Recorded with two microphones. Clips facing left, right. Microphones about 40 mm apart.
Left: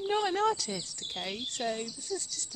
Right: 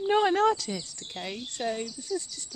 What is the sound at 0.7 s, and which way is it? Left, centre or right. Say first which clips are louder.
Speech: right 2 dB; centre.